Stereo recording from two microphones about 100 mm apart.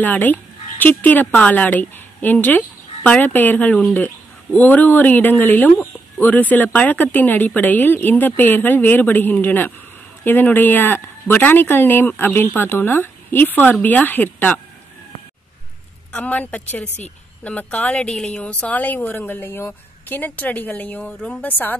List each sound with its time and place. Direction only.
0.0 s a woman's voice: 15° left (ahead or behind)
16.1 s a woman's voice: 15° left (ahead or behind)